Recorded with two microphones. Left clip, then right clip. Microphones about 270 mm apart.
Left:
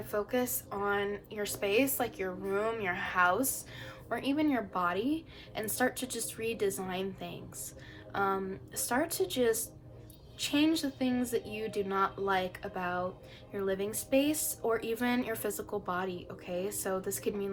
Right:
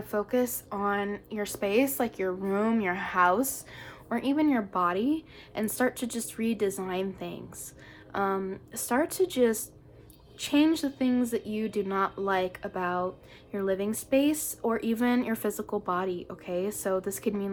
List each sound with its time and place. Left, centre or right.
0.0 s a woman's voice: right